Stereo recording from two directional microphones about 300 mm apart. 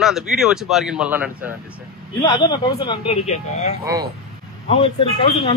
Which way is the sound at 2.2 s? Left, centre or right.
Centre.